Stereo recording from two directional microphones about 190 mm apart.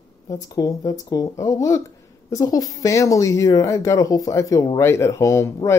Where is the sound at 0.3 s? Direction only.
20° left (ahead or behind).